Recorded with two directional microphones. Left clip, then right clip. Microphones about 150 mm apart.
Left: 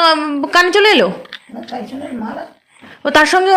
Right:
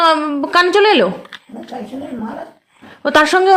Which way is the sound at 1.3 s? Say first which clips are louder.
Left 2 dB; 35° right (ahead or behind).